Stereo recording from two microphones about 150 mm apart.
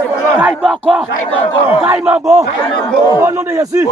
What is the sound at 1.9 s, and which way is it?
A man's voice, 10° right (ahead or behind).